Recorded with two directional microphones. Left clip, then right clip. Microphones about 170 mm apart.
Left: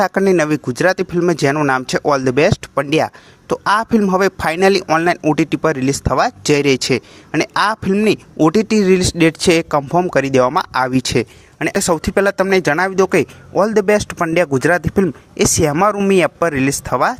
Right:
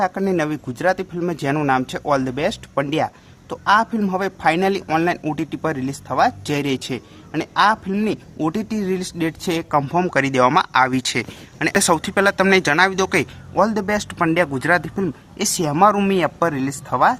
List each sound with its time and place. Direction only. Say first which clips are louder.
0.0 s speech: left 6 dB; 35° left (ahead or behind)